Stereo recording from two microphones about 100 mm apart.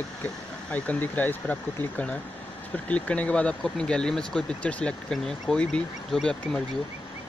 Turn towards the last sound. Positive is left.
turn(degrees=5)  # may be behind; listen again after turning